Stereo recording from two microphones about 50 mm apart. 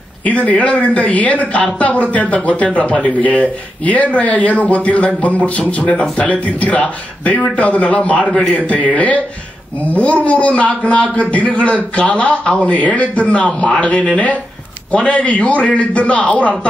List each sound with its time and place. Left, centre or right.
0.2 s speech: left
8.2 s a man's voice: centre
8.6 s speech: left